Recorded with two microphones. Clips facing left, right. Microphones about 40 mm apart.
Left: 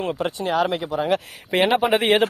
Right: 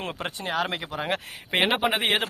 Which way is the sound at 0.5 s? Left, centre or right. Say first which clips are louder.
Left 6 dB; right.